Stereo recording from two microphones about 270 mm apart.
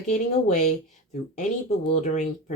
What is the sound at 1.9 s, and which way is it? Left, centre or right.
Speech, left.